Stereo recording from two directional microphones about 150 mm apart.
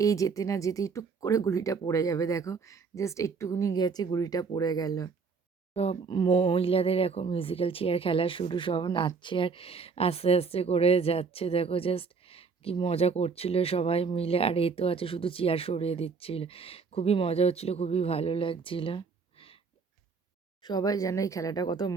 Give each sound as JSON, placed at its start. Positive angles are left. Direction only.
{"t": 0.0, "sound": "speech", "side_deg": 20}
{"t": 5.7, "sound": "speech", "side_deg": 40}
{"t": 20.6, "sound": "speech", "side_deg": 30}